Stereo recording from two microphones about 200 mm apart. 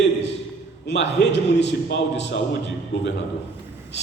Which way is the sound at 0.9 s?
60° left (ahead or behind).